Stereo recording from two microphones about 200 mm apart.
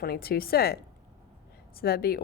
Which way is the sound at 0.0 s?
50° left (ahead or behind).